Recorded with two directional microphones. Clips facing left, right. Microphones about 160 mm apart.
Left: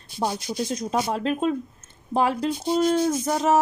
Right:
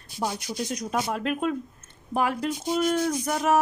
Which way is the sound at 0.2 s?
30° left (ahead or behind).